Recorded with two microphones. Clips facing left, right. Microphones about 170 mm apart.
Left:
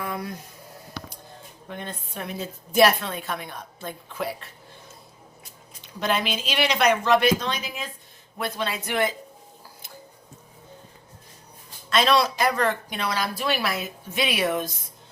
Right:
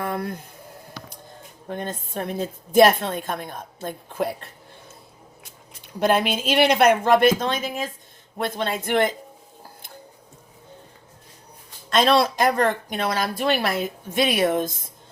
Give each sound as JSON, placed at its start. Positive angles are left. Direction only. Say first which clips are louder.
{"t": 0.0, "sound": "a sound", "louder": "right 4 dB", "side_deg": -50}
{"t": 1.6, "sound": "speech", "louder": "right 6 dB", "side_deg": -45}
{"t": 6.0, "sound": "speech", "louder": "right 5 dB", "side_deg": -55}
{"t": 11.9, "sound": "speech", "louder": "right 3 dB", "side_deg": -50}